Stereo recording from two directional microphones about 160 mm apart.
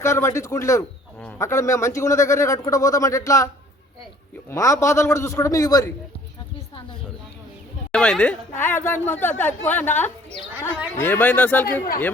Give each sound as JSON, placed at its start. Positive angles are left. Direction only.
{"t": 0.0, "sound": "speech", "side_deg": 15}
{"t": 7.9, "sound": "speech", "side_deg": 5}